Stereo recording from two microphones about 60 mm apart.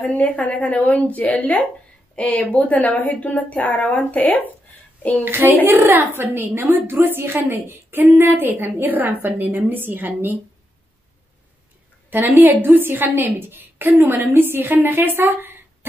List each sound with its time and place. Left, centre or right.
0.2 s speech: left
5.2 s a woman's voice: right
12.1 s a woman's voice: right